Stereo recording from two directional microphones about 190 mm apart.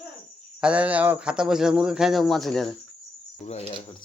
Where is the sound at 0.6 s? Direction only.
5° right (ahead or behind).